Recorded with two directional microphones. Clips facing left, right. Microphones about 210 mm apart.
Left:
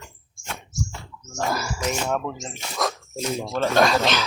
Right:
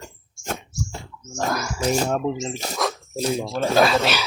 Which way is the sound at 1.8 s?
40° right (ahead or behind).